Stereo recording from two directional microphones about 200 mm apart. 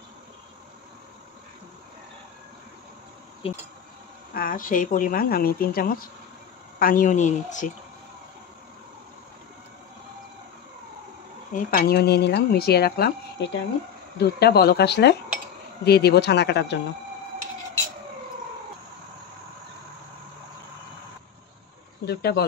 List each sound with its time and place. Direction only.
4.3 s a woman's voice: 45° left (ahead or behind)
11.5 s speech: 50° left (ahead or behind)
22.0 s speech: 55° left (ahead or behind)